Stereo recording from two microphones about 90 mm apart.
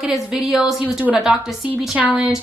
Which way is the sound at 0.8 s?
15° right (ahead or behind).